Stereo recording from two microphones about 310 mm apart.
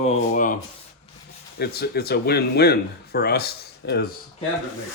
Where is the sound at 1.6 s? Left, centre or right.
Left.